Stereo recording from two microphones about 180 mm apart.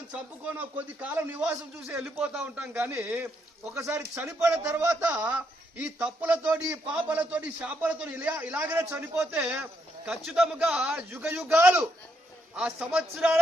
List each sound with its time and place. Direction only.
1.0 s a man's voice: 10° right (ahead or behind)